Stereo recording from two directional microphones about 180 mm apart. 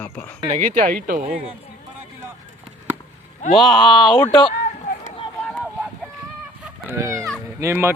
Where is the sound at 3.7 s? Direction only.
25° left (ahead or behind).